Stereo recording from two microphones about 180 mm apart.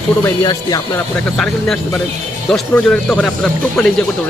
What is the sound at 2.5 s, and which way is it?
Speech, 5° left (ahead or behind).